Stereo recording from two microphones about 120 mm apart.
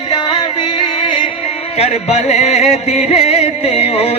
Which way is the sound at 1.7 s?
60° left (ahead or behind).